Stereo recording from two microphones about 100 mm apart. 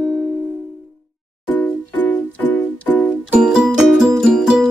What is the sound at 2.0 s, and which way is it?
Music, 15° left (ahead or behind).